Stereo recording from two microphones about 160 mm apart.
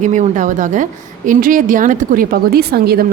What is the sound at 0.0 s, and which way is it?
A woman's voice, 50° right (ahead or behind).